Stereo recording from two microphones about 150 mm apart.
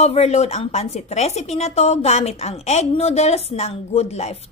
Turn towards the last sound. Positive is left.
turn(degrees=45)  # may be behind; listen again after turning